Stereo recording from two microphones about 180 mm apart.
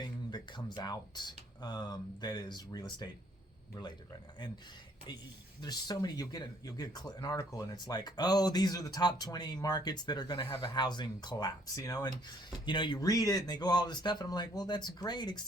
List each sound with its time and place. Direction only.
0.0 s speech: 20° left (ahead or behind)
5.6 s speech: 20° left (ahead or behind)